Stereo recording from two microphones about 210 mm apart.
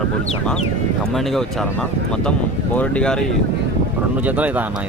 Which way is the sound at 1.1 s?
Centre (ahead or behind).